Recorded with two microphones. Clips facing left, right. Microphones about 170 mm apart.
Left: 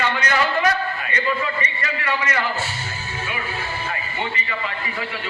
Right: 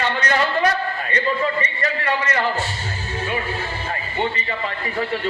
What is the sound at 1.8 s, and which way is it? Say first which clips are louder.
Speech: right 3 dB; 35° right (ahead or behind).